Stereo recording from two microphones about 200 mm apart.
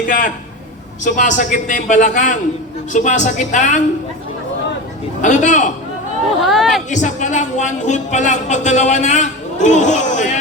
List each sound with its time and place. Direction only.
1.0 s speech: 40° left (ahead or behind)
5.2 s speech: 35° left (ahead or behind)
6.4 s speech: centre (ahead or behind)
6.9 s speech: 35° left (ahead or behind)